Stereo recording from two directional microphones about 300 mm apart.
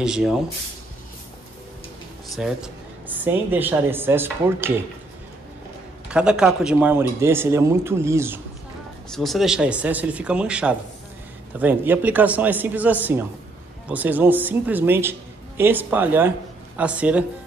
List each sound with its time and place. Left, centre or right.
0.0 s speech: centre
2.3 s a woman's voice: centre
6.0 s a woman's voice: centre